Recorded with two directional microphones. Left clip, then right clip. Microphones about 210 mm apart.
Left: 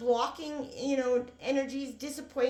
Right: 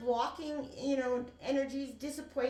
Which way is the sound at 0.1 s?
40° left (ahead or behind).